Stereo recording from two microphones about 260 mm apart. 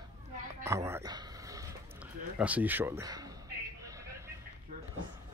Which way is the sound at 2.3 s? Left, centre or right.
Centre.